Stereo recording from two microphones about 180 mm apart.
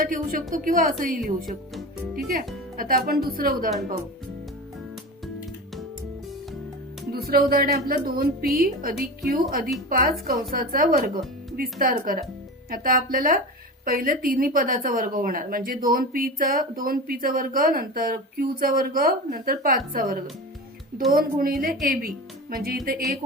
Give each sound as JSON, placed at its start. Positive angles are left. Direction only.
{"t": 0.0, "sound": "speech", "side_deg": -50}
{"t": 1.2, "sound": "speech", "side_deg": 0}
{"t": 2.1, "sound": "speech", "side_deg": -50}
{"t": 7.3, "sound": "a woman's voice", "side_deg": -55}
{"t": 21.2, "sound": "a woman's voice", "side_deg": -55}